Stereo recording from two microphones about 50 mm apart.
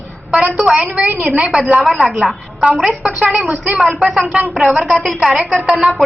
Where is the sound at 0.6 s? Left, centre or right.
Centre.